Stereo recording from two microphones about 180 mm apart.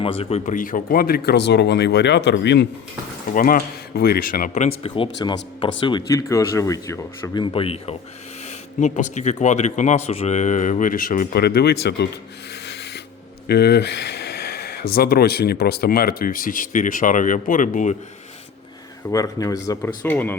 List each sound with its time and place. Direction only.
0.0 s speech: 30° left (ahead or behind); by 2.6 s 70° left (ahead or behind)
3.3 s speech: 50° left (ahead or behind)
12.6 s rub: 65° left (ahead or behind)
13.5 s a sound: 60° left (ahead or behind)
14.9 s speech: 60° left (ahead or behind)
19.0 s speech: 20° left (ahead or behind)